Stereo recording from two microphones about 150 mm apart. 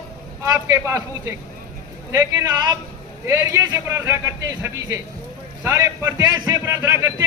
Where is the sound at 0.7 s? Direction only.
20° right (ahead or behind).